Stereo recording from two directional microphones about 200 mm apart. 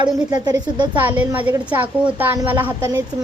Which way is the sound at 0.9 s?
10° right (ahead or behind).